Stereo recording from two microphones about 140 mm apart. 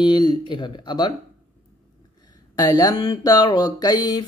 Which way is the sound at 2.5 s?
25° left (ahead or behind).